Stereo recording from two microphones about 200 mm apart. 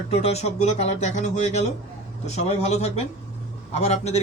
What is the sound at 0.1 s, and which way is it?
Speech, 30° left (ahead or behind).